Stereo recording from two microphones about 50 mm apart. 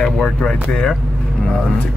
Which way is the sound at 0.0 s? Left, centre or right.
Centre.